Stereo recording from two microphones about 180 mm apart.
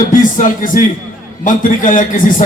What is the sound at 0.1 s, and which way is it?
A man's voice, 45° left (ahead or behind).